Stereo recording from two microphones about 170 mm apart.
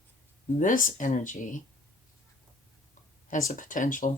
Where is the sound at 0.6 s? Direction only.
50° left (ahead or behind).